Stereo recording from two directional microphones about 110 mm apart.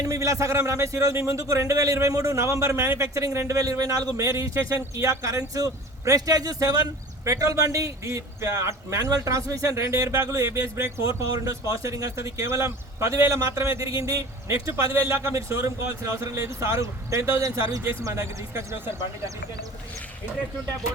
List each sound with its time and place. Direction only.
0.0 s a man's voice: 30° right (ahead or behind)